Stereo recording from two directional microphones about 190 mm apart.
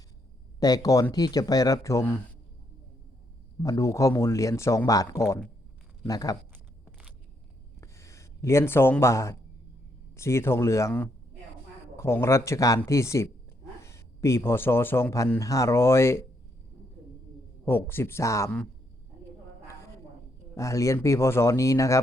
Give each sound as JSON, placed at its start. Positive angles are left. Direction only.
{"t": 0.6, "sound": "speech", "side_deg": 20}
{"t": 3.6, "sound": "a man's voice", "side_deg": 15}
{"t": 7.8, "sound": "a sound", "side_deg": 15}
{"t": 10.2, "sound": "a man's voice", "side_deg": 15}
{"t": 17.7, "sound": "a man's voice", "side_deg": 10}
{"t": 20.6, "sound": "a man's voice", "side_deg": 15}